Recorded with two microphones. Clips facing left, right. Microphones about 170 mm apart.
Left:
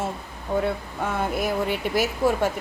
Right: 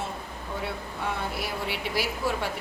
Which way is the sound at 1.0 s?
45° left (ahead or behind).